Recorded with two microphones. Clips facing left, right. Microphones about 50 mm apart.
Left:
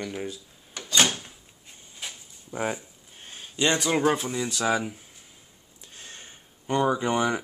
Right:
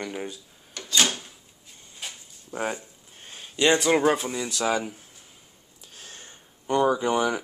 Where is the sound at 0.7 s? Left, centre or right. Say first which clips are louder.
Left 1 dB; centre.